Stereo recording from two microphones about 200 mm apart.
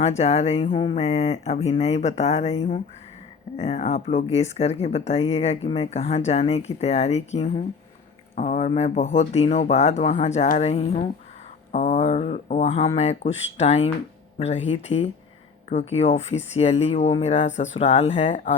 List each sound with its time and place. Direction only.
0.0 s speech: 35° left (ahead or behind)